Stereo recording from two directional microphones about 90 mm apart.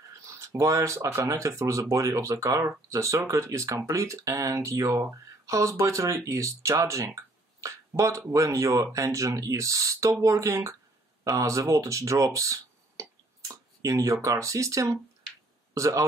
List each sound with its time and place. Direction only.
0.4 s a man's voice: 35° right (ahead or behind)